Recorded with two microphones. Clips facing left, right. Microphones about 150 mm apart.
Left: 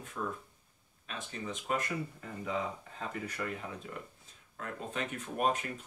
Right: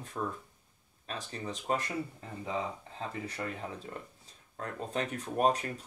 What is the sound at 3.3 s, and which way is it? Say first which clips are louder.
Speech: right 1 dB; 30° right (ahead or behind).